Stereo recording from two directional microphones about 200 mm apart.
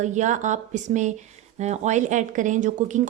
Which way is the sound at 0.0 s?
35° right (ahead or behind).